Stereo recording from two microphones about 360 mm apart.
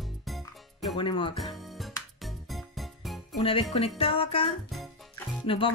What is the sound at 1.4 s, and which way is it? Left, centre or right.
Music, centre.